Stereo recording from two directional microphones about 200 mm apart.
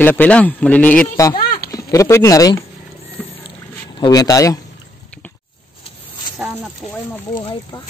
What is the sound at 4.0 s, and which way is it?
Speech, 20° left (ahead or behind).